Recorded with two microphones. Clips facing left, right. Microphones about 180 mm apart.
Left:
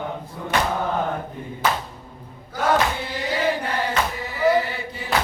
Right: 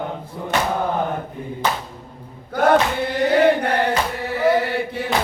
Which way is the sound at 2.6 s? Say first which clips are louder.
Right 5 dB; 60° right (ahead or behind).